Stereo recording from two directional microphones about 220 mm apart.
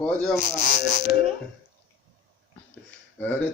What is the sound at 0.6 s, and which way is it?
Speech, 35° left (ahead or behind).